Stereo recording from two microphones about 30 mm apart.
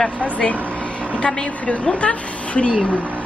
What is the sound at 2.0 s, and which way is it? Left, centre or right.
Speech, left.